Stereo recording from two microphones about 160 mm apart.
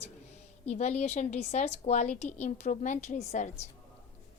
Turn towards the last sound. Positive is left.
turn(degrees=45)  # may be behind; listen again after turning